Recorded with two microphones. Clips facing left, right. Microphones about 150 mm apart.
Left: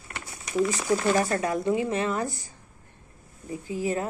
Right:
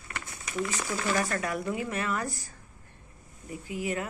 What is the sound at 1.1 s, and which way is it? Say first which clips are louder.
A woman's voice: left 5 dB; 25° left (ahead or behind).